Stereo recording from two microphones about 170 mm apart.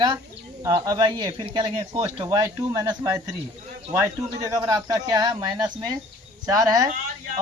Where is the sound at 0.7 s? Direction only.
25° right (ahead or behind).